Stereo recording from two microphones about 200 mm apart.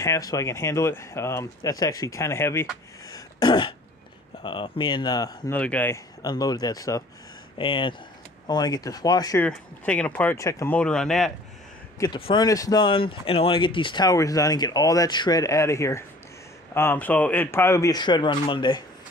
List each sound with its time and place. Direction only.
0.0 s speech: 15° left (ahead or behind)
5.6 s speech: 5° left (ahead or behind)
6.2 s speech: 20° left (ahead or behind)
9.5 s speech: 5° left (ahead or behind)
12.0 s speech: 20° left (ahead or behind)